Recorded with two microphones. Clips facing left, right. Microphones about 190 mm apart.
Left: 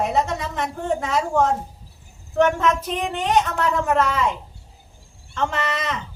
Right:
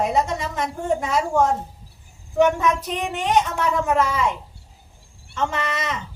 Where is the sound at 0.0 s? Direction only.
Centre (ahead or behind).